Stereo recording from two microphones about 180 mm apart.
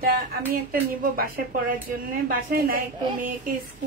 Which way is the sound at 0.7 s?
55° right (ahead or behind).